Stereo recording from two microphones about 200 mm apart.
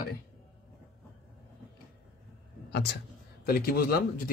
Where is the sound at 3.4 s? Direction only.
50° left (ahead or behind).